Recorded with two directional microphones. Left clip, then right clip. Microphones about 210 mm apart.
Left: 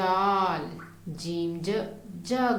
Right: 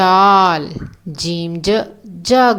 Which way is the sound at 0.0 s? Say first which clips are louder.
Right 15 dB; 40° right (ahead or behind).